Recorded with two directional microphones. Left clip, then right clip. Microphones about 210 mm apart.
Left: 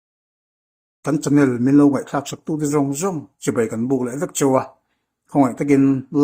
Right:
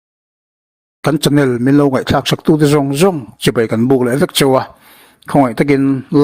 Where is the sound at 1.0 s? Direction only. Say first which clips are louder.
Right 5 dB; 40° right (ahead or behind).